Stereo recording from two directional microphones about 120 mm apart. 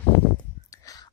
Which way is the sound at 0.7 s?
30° left (ahead or behind).